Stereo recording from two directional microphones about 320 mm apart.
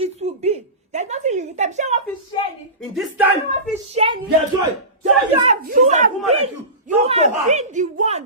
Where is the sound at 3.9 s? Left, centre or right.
Centre.